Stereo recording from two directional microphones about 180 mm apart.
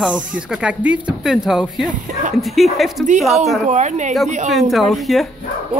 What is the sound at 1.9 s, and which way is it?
Speech, 45° right (ahead or behind).